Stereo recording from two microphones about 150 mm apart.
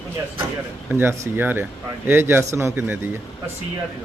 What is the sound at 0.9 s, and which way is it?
Speech, 15° right (ahead or behind).